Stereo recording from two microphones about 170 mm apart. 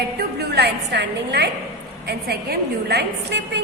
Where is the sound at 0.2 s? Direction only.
70° right (ahead or behind).